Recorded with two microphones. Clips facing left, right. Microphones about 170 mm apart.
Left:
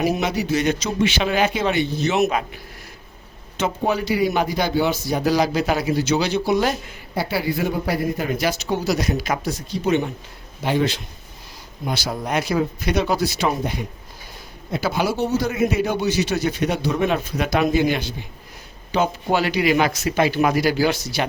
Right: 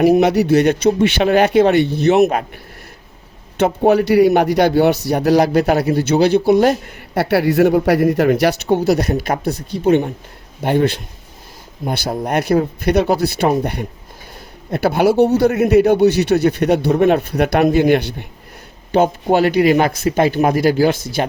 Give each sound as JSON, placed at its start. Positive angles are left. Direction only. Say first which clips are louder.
{"t": 0.0, "sound": "a man's voice", "louder": "right 10 dB", "side_deg": -60}
{"t": 3.6, "sound": "a man's voice", "louder": "right 9 dB", "side_deg": -65}
{"t": 7.1, "sound": "a man's voice", "louder": "right 8 dB", "side_deg": -70}
{"t": 12.2, "sound": "a man's voice", "louder": "right 6 dB", "side_deg": -60}
{"t": 14.7, "sound": "a man's voice", "louder": "right 8 dB", "side_deg": -60}